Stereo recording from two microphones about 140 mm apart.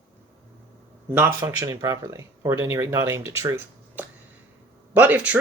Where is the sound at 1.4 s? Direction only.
20° right (ahead or behind).